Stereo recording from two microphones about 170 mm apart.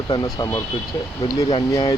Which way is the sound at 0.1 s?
25° left (ahead or behind).